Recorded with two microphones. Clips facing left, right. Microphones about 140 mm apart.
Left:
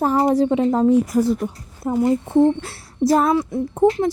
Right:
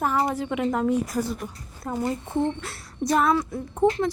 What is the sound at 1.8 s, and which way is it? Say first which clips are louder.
Speech: left 8 dB; 15° left (ahead or behind).